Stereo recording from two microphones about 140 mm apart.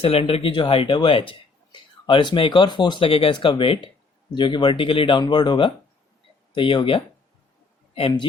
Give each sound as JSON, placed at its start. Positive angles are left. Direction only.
{"t": 0.0, "sound": "speech", "side_deg": 45}